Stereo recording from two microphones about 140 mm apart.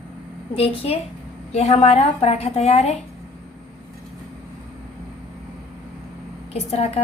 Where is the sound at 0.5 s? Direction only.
45° left (ahead or behind).